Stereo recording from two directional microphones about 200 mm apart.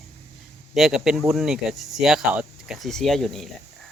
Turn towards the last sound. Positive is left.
turn(degrees=0)  # may be behind; listen again after turning